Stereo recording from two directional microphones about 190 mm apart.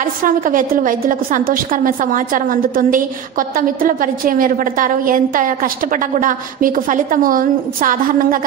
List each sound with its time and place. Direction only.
0.2 s a woman's voice: 45° right (ahead or behind)